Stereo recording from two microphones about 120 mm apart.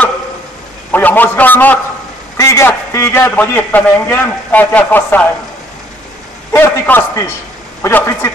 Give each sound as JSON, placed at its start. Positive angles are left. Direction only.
{"t": 0.9, "sound": "a man's voice", "side_deg": 15}
{"t": 2.3, "sound": "a man's voice", "side_deg": 25}
{"t": 6.5, "sound": "a man's voice", "side_deg": 20}